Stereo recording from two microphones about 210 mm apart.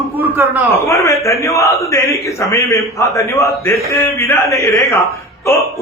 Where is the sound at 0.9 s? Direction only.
15° left (ahead or behind).